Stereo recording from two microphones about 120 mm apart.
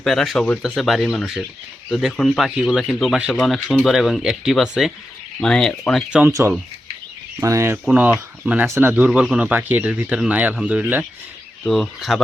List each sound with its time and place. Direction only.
0.0 s speech: centre (ahead or behind)
6.1 s speech: 10° right (ahead or behind)
7.3 s speech: 25° right (ahead or behind)
7.9 s speech: 15° right (ahead or behind)
11.6 s speech: centre (ahead or behind)